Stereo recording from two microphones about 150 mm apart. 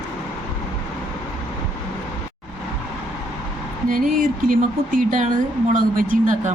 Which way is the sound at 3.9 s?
65° right (ahead or behind).